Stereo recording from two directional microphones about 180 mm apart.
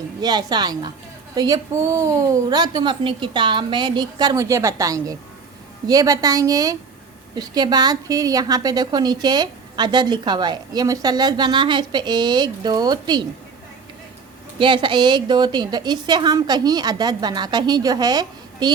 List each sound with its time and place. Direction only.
0.2 s a woman's voice: 25° right (ahead or behind)
14.6 s a woman's voice: 25° right (ahead or behind)